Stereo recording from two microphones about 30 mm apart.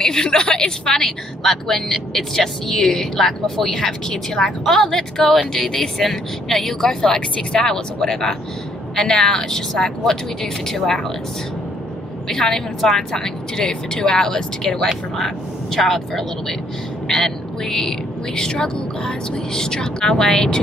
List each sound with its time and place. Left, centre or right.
0.0 s speech: left
1.0 s speech: centre
12.3 s speech: centre
15.1 s speech: centre